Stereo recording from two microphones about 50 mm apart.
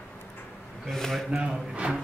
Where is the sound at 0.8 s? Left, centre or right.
Centre.